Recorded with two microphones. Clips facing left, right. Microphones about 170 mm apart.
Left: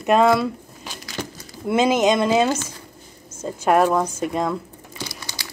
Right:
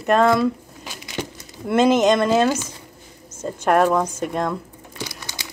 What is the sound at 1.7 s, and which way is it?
Speech, 5° left (ahead or behind).